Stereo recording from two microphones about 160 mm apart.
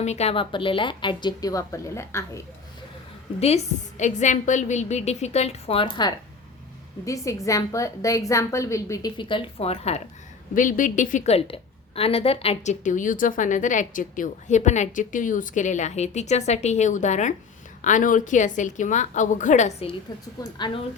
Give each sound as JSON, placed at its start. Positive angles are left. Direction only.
{"t": 0.0, "sound": "a woman's voice", "side_deg": 45}
{"t": 3.4, "sound": "a woman's voice", "side_deg": 45}
{"t": 10.5, "sound": "a woman's voice", "side_deg": 55}
{"t": 20.4, "sound": "a woman's voice", "side_deg": 25}